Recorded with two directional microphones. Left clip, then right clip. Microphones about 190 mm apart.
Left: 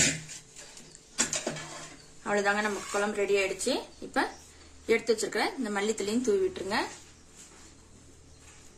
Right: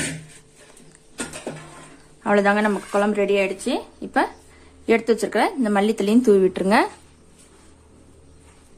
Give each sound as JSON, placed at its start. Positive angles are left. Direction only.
{"t": 2.2, "sound": "speech", "side_deg": -45}